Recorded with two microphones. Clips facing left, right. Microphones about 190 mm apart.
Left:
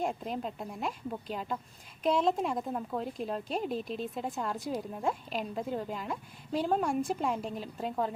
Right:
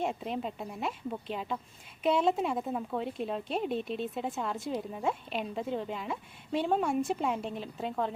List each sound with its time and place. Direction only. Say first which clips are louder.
0.0 s speech: right 1 dB; centre (ahead or behind)